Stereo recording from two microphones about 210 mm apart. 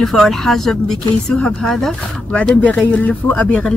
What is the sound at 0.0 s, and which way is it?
Speech, centre (ahead or behind).